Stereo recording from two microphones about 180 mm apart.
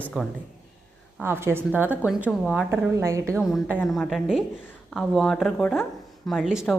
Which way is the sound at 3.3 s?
Centre (ahead or behind).